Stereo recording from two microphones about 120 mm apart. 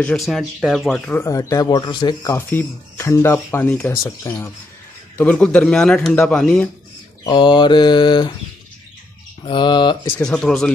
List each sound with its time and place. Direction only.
0.0 s speech: 5° left (ahead or behind)
1.2 s speech: 25° left (ahead or behind)
2.3 s speech: 20° left (ahead or behind)
5.1 s speech: 10° left (ahead or behind)
7.2 s speech: 40° left (ahead or behind)
9.4 s speech: 40° left (ahead or behind)
10.2 s speech: 5° left (ahead or behind)